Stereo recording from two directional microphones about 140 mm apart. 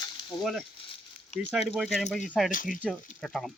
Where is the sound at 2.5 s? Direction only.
75° left (ahead or behind).